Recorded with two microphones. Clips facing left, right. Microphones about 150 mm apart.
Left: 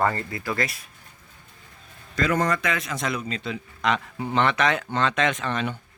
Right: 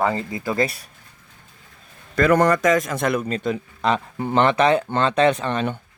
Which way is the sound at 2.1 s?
60° right (ahead or behind).